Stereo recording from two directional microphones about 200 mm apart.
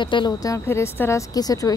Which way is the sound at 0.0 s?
25° left (ahead or behind).